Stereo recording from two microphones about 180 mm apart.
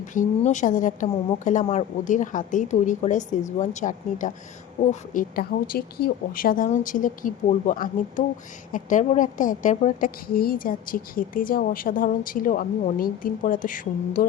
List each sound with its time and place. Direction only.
0.0 s a woman's voice: 45° left (ahead or behind)